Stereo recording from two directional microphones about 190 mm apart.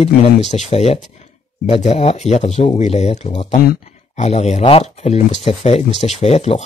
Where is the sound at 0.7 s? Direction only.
35° left (ahead or behind).